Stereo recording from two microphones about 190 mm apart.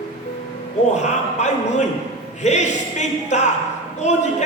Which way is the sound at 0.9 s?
35° left (ahead or behind).